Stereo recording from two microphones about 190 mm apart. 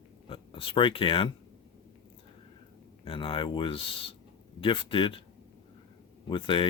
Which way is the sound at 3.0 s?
25° left (ahead or behind).